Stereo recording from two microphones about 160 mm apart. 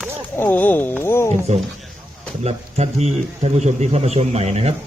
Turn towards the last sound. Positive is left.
turn(degrees=-40)  # may be behind; listen again after turning